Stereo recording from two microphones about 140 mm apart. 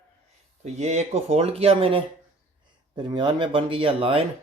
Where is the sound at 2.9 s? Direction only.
35° right (ahead or behind).